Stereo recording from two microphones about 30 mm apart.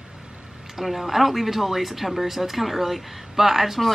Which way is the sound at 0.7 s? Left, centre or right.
Centre.